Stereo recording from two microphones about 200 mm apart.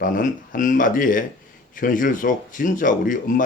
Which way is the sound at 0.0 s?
40° left (ahead or behind).